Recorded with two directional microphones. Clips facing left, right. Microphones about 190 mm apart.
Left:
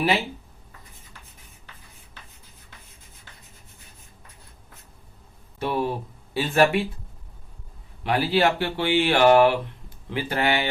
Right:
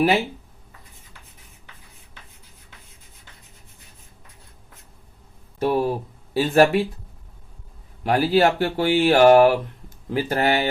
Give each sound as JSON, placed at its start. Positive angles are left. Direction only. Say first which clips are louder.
{"t": 5.5, "sound": "a sound", "louder": "right 5 dB", "side_deg": -40}
{"t": 6.3, "sound": "speech", "louder": "right 4 dB", "side_deg": -40}
{"t": 8.0, "sound": "speech", "louder": "right 4 dB", "side_deg": -45}